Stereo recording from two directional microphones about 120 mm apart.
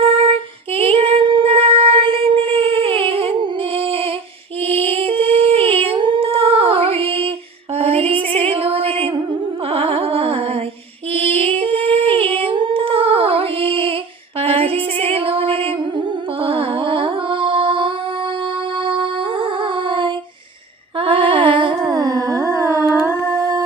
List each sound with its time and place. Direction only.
0.0 s female singing: 50° right (ahead or behind)
4.6 s singing: 55° right (ahead or behind)
7.8 s a sound: 55° right (ahead or behind)
9.6 s music: 50° right (ahead or behind)
11.1 s singing: 55° right (ahead or behind)
11.5 s humming: 50° right (ahead or behind)
12.4 s female singing: 45° right (ahead or behind)
14.3 s music: 55° right (ahead or behind)
21.8 s a sound: 35° right (ahead or behind)